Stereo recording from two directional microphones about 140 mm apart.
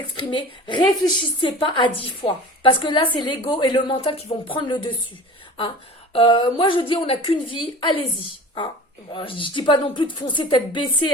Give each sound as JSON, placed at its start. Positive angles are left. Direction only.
{"t": 0.2, "sound": "a woman's voice", "side_deg": 35}
{"t": 6.1, "sound": "a woman's voice", "side_deg": 35}
{"t": 9.1, "sound": "a woman's voice", "side_deg": 40}